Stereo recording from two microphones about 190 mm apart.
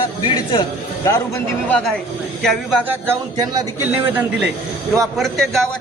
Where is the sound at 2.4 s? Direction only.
Centre (ahead or behind).